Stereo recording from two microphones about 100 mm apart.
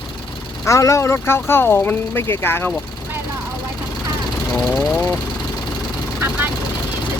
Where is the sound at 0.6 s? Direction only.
30° left (ahead or behind).